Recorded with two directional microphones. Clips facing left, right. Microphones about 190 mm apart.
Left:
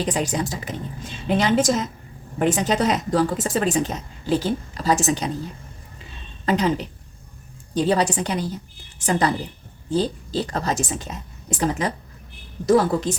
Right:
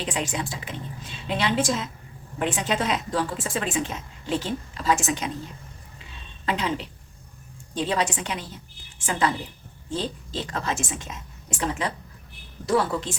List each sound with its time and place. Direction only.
0.0 s a woman's voice: 40° left (ahead or behind)
6.4 s a woman's voice: 40° left (ahead or behind)